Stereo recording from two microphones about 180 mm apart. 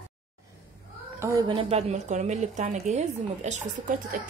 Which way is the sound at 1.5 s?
35° right (ahead or behind).